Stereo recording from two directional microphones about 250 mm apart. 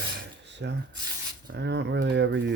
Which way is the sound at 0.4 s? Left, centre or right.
Right.